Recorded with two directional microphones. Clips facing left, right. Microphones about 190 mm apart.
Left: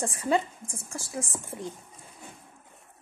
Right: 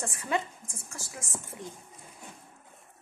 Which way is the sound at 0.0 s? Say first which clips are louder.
Left 5 dB; 35° left (ahead or behind).